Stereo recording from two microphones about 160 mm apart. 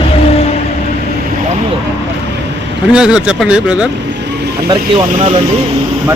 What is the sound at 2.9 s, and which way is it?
Speech, 5° right (ahead or behind).